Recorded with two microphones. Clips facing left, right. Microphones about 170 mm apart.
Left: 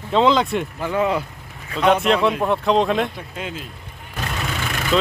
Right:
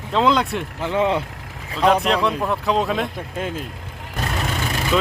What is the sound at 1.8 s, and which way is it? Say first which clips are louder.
Speech: left 1 dB; centre (ahead or behind).